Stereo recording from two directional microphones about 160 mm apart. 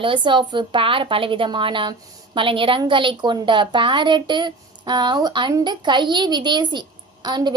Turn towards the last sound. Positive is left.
turn(degrees=-25)  # may be behind; listen again after turning